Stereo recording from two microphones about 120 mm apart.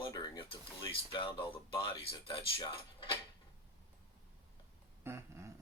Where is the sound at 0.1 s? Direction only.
45° left (ahead or behind).